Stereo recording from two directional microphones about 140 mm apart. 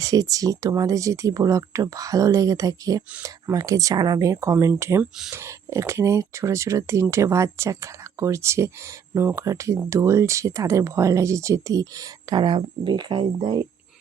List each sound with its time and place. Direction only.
0.0 s speech: 25° right (ahead or behind)